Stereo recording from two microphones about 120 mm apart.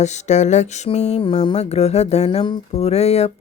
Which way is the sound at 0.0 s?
75° left (ahead or behind).